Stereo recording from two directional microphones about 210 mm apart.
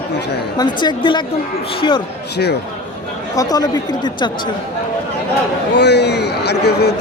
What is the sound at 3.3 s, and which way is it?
Speech, 15° left (ahead or behind).